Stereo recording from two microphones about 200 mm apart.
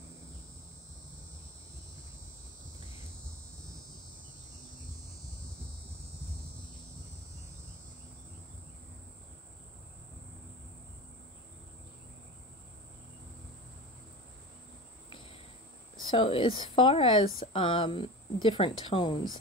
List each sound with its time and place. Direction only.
16.0 s speech: 25° left (ahead or behind)